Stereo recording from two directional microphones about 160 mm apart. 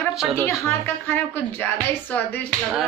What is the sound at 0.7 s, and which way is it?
A woman's voice, 15° left (ahead or behind).